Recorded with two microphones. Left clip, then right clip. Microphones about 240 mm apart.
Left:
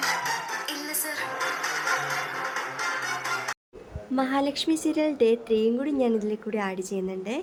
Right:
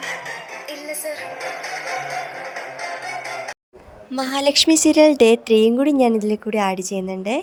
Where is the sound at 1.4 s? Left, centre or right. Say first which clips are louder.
Even; centre.